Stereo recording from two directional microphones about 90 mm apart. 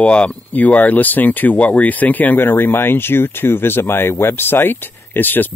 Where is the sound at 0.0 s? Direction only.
15° left (ahead or behind).